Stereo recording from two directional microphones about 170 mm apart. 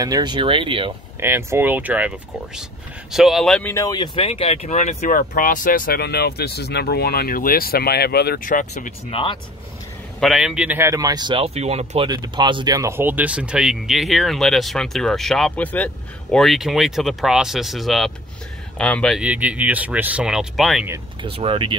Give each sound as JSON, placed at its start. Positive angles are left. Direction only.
{"t": 0.0, "sound": "speech", "side_deg": -25}
{"t": 1.2, "sound": "speech", "side_deg": -15}
{"t": 3.7, "sound": "speech", "side_deg": 20}
{"t": 9.1, "sound": "speech", "side_deg": 30}
{"t": 10.2, "sound": "speech", "side_deg": -5}
{"t": 12.1, "sound": "speech", "side_deg": -25}
{"t": 19.2, "sound": "speech", "side_deg": -10}
{"t": 21.2, "sound": "speech", "side_deg": -35}